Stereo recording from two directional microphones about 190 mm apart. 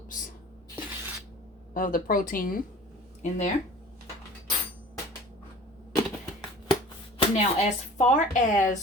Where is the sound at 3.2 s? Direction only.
35° left (ahead or behind).